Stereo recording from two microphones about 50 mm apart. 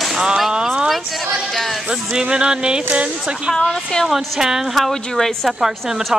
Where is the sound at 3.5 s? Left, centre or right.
Centre.